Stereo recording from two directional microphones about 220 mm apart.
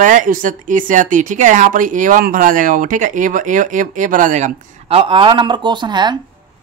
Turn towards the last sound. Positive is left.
turn(degrees=-20)  # may be behind; listen again after turning